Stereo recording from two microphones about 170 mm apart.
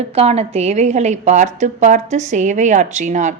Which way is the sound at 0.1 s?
40° right (ahead or behind).